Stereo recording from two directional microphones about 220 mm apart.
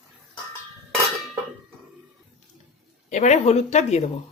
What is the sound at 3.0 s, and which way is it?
Speech, 30° left (ahead or behind).